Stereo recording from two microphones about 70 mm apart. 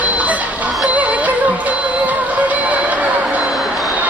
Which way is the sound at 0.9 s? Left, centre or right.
Right.